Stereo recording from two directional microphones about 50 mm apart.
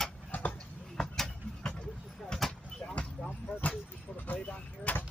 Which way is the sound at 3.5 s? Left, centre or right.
Left.